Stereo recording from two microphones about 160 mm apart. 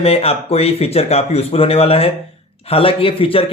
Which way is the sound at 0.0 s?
35° left (ahead or behind).